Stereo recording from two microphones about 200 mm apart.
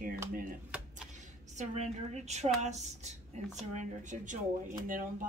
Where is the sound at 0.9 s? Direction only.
35° right (ahead or behind).